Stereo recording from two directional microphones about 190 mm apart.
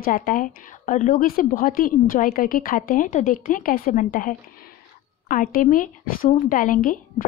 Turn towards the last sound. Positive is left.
turn(degrees=45)  # may be behind; listen again after turning